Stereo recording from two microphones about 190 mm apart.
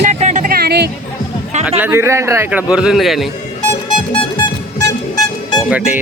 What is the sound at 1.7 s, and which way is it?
Speech, 10° right (ahead or behind).